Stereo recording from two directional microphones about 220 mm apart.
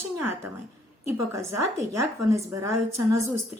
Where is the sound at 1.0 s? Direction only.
10° right (ahead or behind).